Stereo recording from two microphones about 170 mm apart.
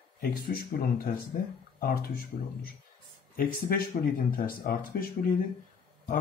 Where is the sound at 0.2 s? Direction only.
60° left (ahead or behind).